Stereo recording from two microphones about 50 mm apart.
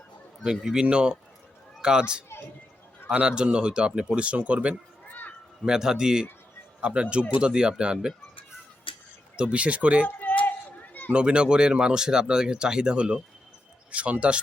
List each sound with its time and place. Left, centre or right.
0.4 s speech: centre
0.9 s speech: right
4.7 s a sound: left
5.6 s speech: centre
9.4 s speech: right
10.2 s a sound: left
11.1 s speech: right